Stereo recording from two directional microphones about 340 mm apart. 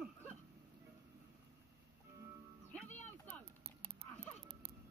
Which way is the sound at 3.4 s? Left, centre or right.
Centre.